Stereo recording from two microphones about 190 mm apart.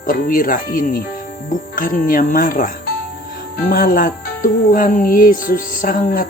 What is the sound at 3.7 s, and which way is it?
Speech, 50° left (ahead or behind).